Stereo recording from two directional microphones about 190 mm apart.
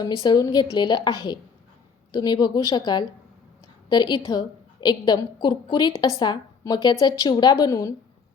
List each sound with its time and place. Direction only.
0.2 s a woman's voice: 20° left (ahead or behind)